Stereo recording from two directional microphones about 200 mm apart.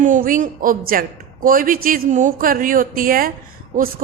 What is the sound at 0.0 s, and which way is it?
A woman's voice, 40° right (ahead or behind).